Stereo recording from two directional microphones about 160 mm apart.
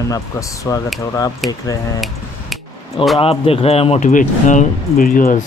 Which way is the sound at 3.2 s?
35° left (ahead or behind).